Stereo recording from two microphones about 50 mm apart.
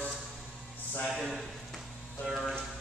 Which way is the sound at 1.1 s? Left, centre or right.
Centre.